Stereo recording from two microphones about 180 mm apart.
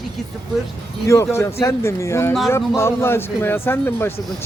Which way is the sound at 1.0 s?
15° left (ahead or behind).